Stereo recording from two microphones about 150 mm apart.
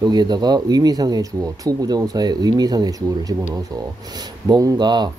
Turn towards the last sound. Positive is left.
turn(degrees=-30)  # may be behind; listen again after turning